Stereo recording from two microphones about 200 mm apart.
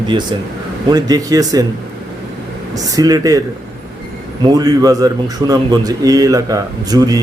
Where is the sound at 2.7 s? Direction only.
20° right (ahead or behind).